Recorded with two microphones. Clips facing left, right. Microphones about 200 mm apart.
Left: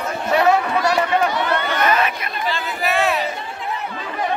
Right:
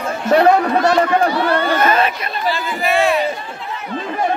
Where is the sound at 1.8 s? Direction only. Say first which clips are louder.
Right 1 dB; 30° right (ahead or behind).